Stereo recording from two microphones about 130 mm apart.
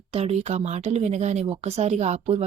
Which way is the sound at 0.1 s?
55° right (ahead or behind).